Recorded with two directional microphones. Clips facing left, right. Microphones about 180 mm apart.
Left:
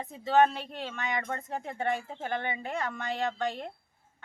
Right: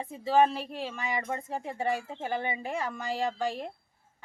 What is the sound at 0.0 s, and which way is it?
A woman's voice, 10° right (ahead or behind).